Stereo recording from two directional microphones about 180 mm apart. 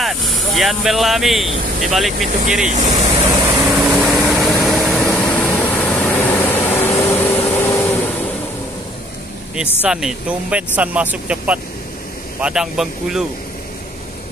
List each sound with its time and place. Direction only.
0.0 s speech: centre (ahead or behind)
2.6 s speech: 40° right (ahead or behind)
3.2 s vehicle: 15° right (ahead or behind)
3.7 s vehicle: 5° right (ahead or behind); by 8.1 s 15° left (ahead or behind)
9.8 s speech: 5° right (ahead or behind)